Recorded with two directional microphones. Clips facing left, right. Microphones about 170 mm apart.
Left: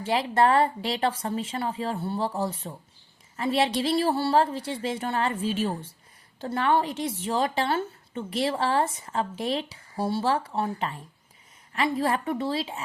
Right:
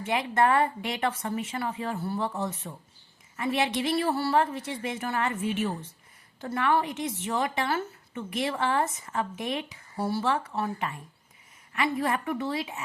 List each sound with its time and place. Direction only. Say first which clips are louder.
0.0 s a woman's voice: left 2 dB; 30° left (ahead or behind)